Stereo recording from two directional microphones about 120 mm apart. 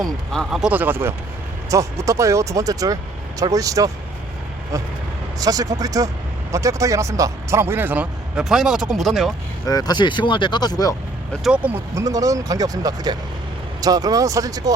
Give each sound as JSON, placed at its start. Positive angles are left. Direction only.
{"t": 0.0, "sound": "speech", "side_deg": 0}
{"t": 5.4, "sound": "speech", "side_deg": -30}
{"t": 9.6, "sound": "speech", "side_deg": 35}
{"t": 11.4, "sound": "speech", "side_deg": -10}
{"t": 11.9, "sound": "speech", "side_deg": -30}